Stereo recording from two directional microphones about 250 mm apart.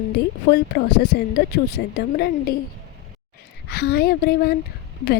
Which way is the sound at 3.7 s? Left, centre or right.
Left.